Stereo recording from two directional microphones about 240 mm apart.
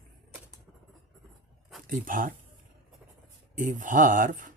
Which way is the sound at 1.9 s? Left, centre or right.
Right.